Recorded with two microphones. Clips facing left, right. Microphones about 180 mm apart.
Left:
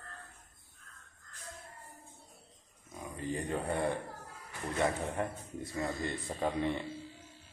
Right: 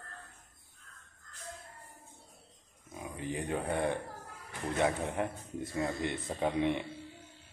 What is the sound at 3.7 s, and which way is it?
A man's voice, 20° right (ahead or behind).